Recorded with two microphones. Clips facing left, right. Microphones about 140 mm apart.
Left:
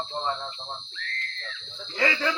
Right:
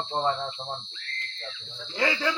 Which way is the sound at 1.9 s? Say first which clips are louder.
Even; 10° right (ahead or behind).